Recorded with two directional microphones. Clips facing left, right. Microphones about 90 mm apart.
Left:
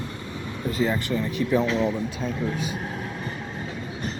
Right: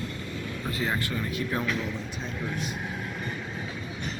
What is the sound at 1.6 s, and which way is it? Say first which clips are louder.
Speech: left 7 dB; 25° left (ahead or behind).